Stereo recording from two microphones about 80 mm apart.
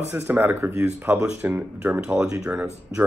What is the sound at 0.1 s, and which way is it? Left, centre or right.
Speech, right.